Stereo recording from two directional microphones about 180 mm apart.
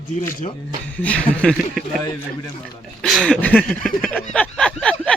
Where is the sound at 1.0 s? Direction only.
5° left (ahead or behind).